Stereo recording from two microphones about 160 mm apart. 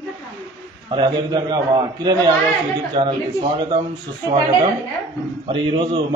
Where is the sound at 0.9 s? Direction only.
30° right (ahead or behind).